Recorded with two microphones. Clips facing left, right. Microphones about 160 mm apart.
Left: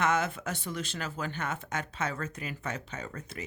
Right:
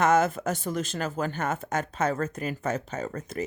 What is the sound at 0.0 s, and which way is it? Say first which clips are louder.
Speech: right 7 dB; 45° right (ahead or behind).